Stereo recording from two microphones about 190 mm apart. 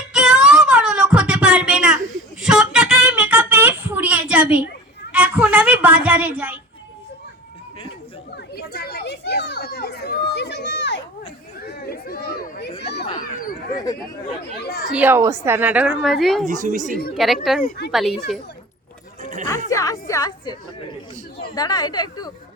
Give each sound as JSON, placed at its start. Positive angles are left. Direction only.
{"t": 0.1, "sound": "child singing", "side_deg": -5}
{"t": 2.4, "sound": "a sound", "side_deg": -5}
{"t": 8.5, "sound": "children playing", "side_deg": 55}
{"t": 11.6, "sound": "chatter", "side_deg": 55}
{"t": 12.8, "sound": "children playing", "side_deg": 60}
{"t": 14.6, "sound": "a sound", "side_deg": 55}
{"t": 14.8, "sound": "a woman's voice", "side_deg": -10}
{"t": 16.5, "sound": "a woman's voice", "side_deg": -45}
{"t": 17.2, "sound": "speech", "side_deg": 0}
{"t": 17.6, "sound": "a woman's voice", "side_deg": 55}
{"t": 17.9, "sound": "speech", "side_deg": 0}
{"t": 19.2, "sound": "music", "side_deg": -40}
{"t": 19.7, "sound": "a sound", "side_deg": 15}
{"t": 21.5, "sound": "speech", "side_deg": 20}